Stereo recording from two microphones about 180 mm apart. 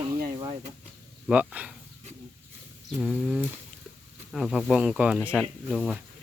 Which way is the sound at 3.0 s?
Centre (ahead or behind).